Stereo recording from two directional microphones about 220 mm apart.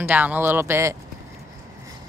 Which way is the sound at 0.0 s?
10° right (ahead or behind).